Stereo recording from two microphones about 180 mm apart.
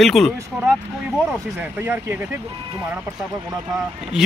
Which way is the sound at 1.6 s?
10° right (ahead or behind).